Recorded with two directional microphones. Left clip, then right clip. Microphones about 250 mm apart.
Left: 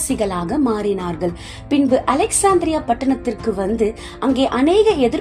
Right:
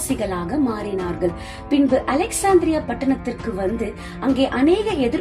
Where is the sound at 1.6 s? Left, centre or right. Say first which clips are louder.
Left 2 dB; left.